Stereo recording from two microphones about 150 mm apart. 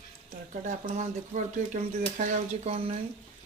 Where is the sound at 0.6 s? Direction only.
55° right (ahead or behind).